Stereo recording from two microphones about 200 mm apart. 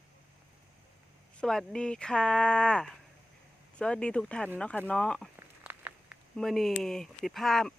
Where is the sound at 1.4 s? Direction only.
5° left (ahead or behind).